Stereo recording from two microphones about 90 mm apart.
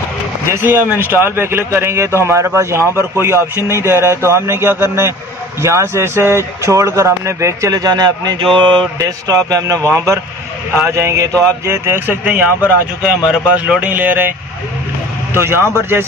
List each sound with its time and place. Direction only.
0.7 s speech: 20° right (ahead or behind); by 8.5 s 50° right (ahead or behind)
8.5 s mantra: 60° right (ahead or behind)
9.0 s speech: 40° right (ahead or behind); by 14.3 s 20° right (ahead or behind)
15.3 s speech: 25° right (ahead or behind)